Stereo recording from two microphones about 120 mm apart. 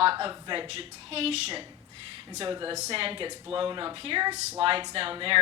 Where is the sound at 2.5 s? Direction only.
40° right (ahead or behind).